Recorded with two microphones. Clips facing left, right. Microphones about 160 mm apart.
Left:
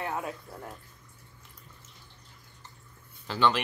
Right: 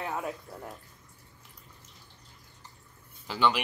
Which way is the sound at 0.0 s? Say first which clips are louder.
Even; 15° left (ahead or behind).